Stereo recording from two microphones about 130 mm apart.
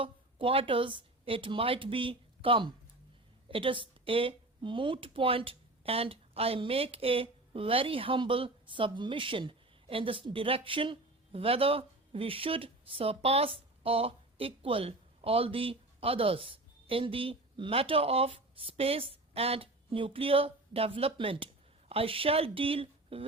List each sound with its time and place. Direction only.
0.0 s speech: 45° right (ahead or behind)